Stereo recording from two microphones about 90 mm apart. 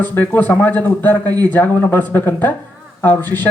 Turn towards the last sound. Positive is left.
turn(degrees=20)  # may be behind; listen again after turning